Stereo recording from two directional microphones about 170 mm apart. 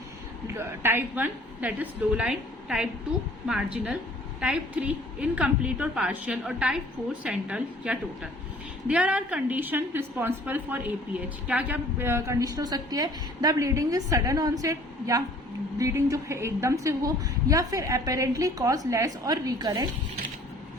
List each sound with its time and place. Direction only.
0.4 s a woman's voice: 15° right (ahead or behind)